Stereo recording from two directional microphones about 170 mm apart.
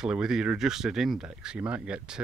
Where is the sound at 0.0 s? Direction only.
5° right (ahead or behind).